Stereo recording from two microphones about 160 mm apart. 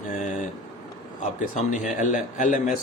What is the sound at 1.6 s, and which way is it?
Speech, 50° left (ahead or behind).